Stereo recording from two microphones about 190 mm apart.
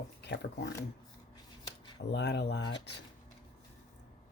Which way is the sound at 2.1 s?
65° left (ahead or behind).